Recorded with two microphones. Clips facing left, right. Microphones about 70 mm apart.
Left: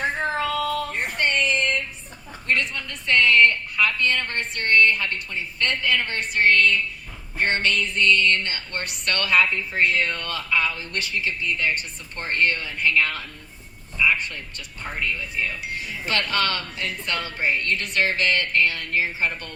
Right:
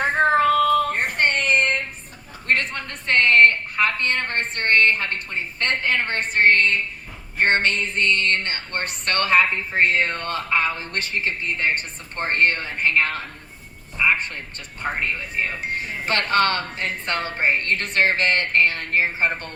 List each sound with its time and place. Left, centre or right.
0.0 s child singing: right
2.5 s a woman's voice: right
7.3 s a sound: right